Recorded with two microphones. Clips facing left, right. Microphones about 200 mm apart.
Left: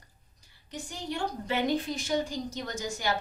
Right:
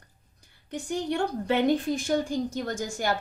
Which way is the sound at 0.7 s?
55° right (ahead or behind).